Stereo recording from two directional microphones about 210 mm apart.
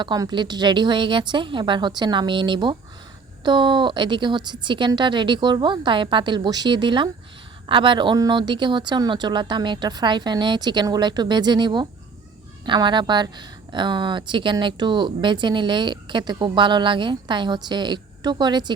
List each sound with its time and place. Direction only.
0.0 s speech: 20° right (ahead or behind)